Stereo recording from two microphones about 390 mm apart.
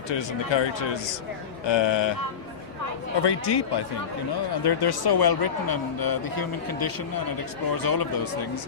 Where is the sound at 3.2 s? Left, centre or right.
Left.